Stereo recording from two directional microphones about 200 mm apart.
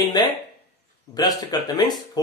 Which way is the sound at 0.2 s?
20° left (ahead or behind).